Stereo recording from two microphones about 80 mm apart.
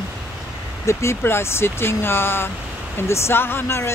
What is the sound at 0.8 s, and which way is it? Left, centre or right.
Speech, left.